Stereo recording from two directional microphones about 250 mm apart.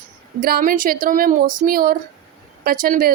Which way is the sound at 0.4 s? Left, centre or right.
Right.